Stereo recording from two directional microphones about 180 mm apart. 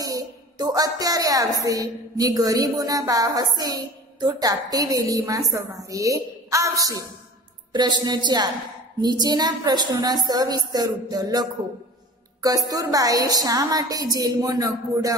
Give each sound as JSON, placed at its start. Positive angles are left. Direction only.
{"t": 0.0, "sound": "a woman's voice", "side_deg": -20}